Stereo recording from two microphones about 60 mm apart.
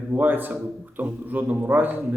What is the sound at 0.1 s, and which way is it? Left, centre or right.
A man's voice, right.